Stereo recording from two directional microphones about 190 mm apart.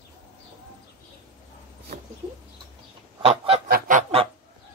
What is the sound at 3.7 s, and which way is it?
Goose, 45° right (ahead or behind).